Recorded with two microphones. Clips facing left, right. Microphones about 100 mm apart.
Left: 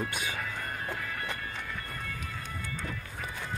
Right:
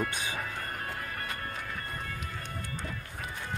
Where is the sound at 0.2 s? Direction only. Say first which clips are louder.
Even; 30° right (ahead or behind).